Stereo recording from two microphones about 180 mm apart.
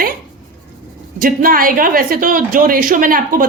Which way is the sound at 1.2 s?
50° right (ahead or behind).